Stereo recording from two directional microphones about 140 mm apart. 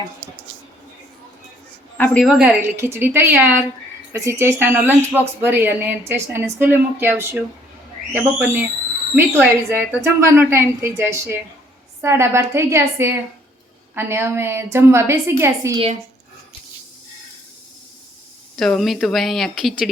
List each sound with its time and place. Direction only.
2.4 s a woman's voice: 15° right (ahead or behind)
18.5 s speech: centre (ahead or behind)